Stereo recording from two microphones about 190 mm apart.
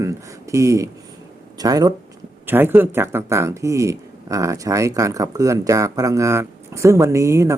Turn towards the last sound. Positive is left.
turn(degrees=-15)  # may be behind; listen again after turning